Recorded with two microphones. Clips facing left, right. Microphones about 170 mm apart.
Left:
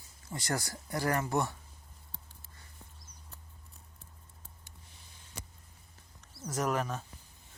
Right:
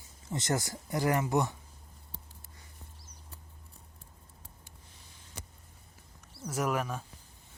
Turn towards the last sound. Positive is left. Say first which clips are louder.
# even
turn(degrees=-10)  # may be behind; listen again after turning